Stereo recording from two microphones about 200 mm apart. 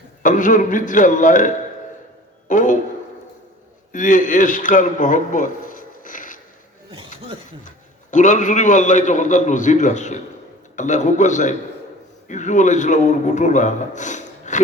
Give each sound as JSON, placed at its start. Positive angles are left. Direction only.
{"t": 0.2, "sound": "a man's voice", "side_deg": 40}
{"t": 3.9, "sound": "a man's voice", "side_deg": 40}
{"t": 8.1, "sound": "a man's voice", "side_deg": 40}